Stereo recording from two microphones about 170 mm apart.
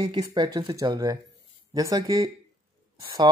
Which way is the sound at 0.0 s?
25° right (ahead or behind).